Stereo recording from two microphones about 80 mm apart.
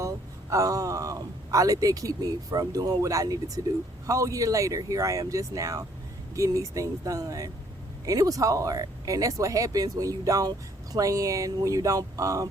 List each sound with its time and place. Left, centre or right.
0.0 s a man's voice: right